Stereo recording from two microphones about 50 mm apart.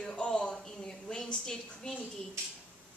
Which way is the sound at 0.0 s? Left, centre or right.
Left.